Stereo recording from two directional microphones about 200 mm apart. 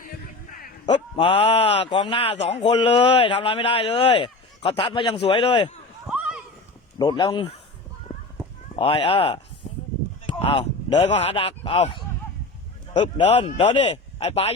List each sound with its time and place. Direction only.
1.1 s speech: 25° left (ahead or behind)
6.1 s a sound: 5° right (ahead or behind)
7.0 s speech: 20° left (ahead or behind)
8.7 s speech: 25° left (ahead or behind)
9.6 s a sound: 30° left (ahead or behind)
10.2 s speech: 25° left (ahead or behind)